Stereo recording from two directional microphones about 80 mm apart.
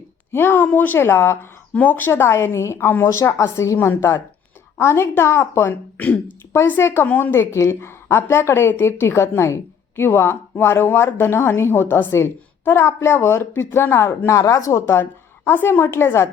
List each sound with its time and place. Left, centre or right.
0.3 s a woman's voice: left